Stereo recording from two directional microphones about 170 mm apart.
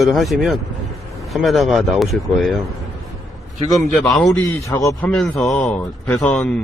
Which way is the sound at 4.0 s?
5° left (ahead or behind).